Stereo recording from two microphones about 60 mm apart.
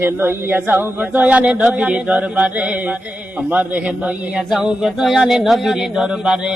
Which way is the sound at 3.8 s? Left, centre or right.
Right.